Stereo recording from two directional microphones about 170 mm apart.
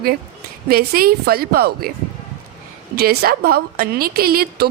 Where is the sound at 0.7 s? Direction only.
60° right (ahead or behind).